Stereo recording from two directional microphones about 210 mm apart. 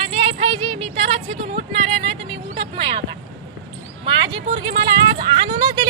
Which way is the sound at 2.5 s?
25° right (ahead or behind).